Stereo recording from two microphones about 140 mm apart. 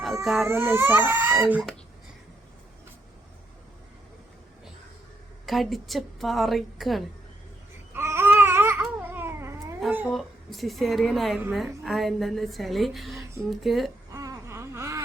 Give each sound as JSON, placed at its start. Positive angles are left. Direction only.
{"t": 0.2, "sound": "a woman's voice", "side_deg": 0}
{"t": 0.4, "sound": "speech", "side_deg": -20}
{"t": 5.5, "sound": "a woman's voice", "side_deg": 0}
{"t": 7.9, "sound": "babbling", "side_deg": -15}
{"t": 10.1, "sound": "a woman's voice", "side_deg": 0}
{"t": 14.1, "sound": "whimper", "side_deg": -25}